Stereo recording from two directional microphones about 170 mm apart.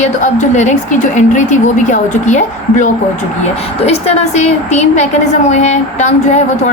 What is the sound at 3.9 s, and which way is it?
A woman's voice, 40° left (ahead or behind).